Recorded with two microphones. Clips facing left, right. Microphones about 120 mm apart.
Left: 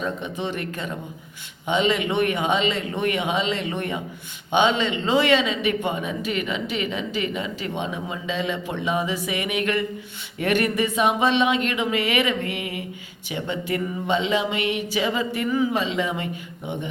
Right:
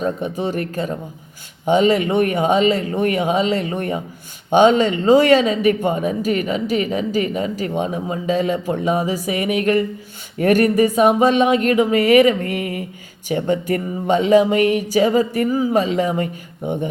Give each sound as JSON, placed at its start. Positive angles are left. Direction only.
{"t": 0.0, "sound": "speech", "side_deg": -40}